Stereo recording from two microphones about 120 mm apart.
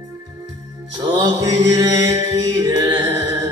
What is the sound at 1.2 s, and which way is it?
Chant, 30° right (ahead or behind).